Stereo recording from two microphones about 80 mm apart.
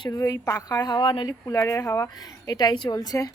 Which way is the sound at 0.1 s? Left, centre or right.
Left.